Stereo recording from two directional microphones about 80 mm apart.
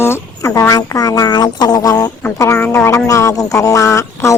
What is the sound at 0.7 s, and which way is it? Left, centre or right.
Music, left.